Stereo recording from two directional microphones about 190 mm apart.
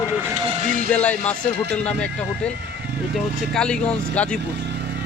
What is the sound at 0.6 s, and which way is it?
Speech, 45° right (ahead or behind).